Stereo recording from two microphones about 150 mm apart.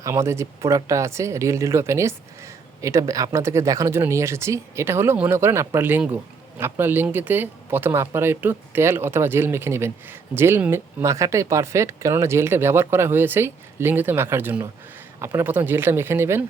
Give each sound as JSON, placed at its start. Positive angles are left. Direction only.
{"t": 0.0, "sound": "speech", "side_deg": -20}